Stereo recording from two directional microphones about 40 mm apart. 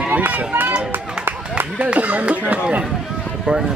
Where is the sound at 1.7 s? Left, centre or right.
Right.